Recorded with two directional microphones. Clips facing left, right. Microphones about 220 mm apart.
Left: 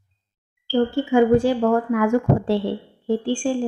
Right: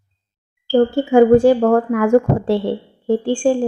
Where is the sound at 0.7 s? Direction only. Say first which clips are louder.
Right 5 dB; 45° right (ahead or behind).